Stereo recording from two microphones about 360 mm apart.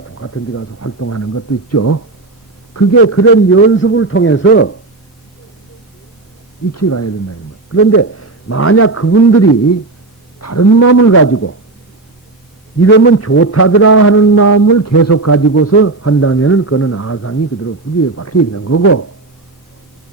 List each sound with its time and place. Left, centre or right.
0.0 s speech: left
2.9 s a man's voice: left
6.7 s a man's voice: left
12.8 s a man's voice: left